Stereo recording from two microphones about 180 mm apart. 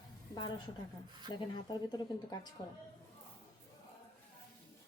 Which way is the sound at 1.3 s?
25° left (ahead or behind).